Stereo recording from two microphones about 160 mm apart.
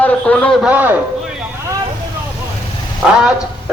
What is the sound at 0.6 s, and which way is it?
Speech, 10° right (ahead or behind).